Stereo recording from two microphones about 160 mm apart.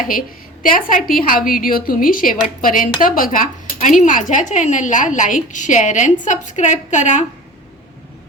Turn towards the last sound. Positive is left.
turn(degrees=50)  # may be behind; listen again after turning